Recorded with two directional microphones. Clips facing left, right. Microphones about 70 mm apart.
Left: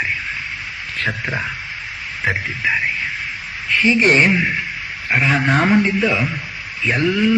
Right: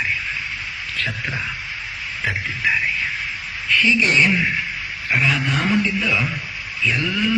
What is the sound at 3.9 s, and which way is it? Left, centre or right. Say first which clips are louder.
Speech: left 5 dB; left.